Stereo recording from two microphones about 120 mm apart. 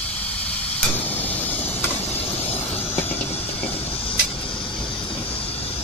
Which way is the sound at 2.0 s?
60° left (ahead or behind).